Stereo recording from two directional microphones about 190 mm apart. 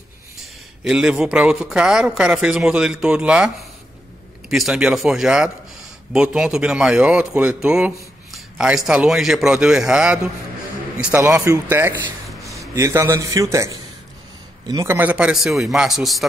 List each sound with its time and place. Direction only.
0.4 s a man's voice: 5° right (ahead or behind)
12.3 s a sound: centre (ahead or behind)
12.7 s a man's voice: 15° right (ahead or behind)